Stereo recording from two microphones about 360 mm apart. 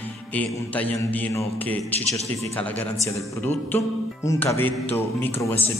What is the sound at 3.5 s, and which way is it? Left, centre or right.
Music, centre.